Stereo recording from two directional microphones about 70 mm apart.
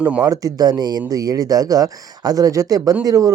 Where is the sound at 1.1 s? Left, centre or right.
Right.